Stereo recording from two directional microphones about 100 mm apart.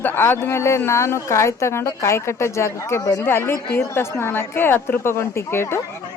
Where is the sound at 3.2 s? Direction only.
25° left (ahead or behind).